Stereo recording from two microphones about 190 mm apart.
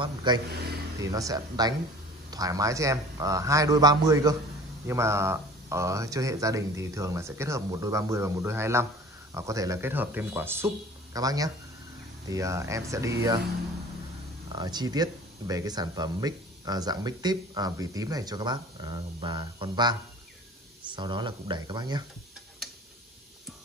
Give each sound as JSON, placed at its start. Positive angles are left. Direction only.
{"t": 0.0, "sound": "speech", "side_deg": -25}
{"t": 14.5, "sound": "speech", "side_deg": -20}